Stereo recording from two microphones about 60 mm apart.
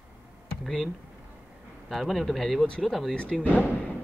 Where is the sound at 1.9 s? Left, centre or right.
Centre.